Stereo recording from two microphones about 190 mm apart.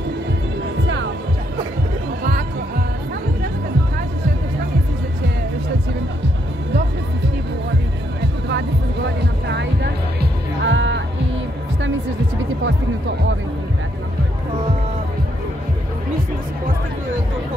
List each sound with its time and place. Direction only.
8.2 s music: 65° right (ahead or behind)
10.6 s music: 75° right (ahead or behind)